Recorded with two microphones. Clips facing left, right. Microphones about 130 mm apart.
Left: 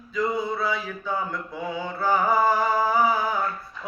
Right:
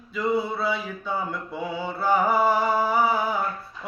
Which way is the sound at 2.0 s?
10° right (ahead or behind).